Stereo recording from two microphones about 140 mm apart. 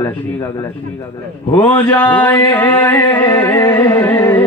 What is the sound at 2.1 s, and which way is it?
Music, 10° left (ahead or behind).